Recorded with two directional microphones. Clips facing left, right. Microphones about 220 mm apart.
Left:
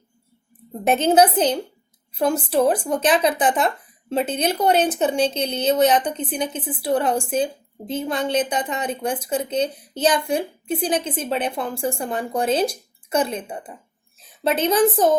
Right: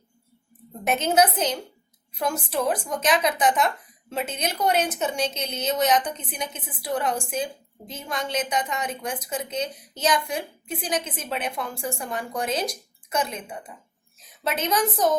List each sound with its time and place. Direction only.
0.9 s a woman's voice: 30° left (ahead or behind)